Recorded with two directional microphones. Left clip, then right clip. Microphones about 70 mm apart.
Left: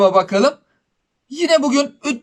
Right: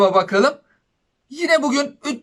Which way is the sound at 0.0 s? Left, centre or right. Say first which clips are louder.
Left 2 dB; left.